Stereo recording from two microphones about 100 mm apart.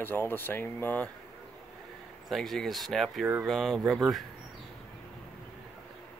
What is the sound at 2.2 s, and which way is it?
Speech, centre (ahead or behind).